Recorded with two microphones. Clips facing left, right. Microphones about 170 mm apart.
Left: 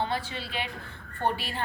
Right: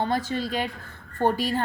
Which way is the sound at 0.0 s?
45° right (ahead or behind).